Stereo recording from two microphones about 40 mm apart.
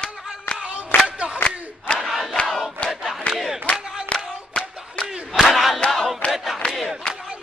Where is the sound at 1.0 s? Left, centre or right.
Right.